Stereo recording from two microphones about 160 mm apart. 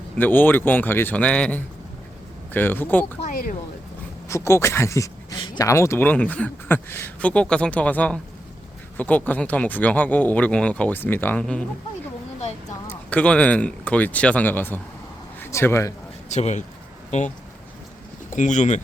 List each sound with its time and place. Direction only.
0.2 s speech: 10° left (ahead or behind)
3.2 s speech: 65° left (ahead or behind)
4.3 s speech: 15° left (ahead or behind)
12.9 s speech: 10° left (ahead or behind)
16.3 s speech: 45° left (ahead or behind)
18.3 s speech: 50° left (ahead or behind)